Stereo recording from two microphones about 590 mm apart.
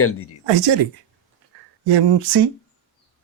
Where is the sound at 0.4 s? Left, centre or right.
Right.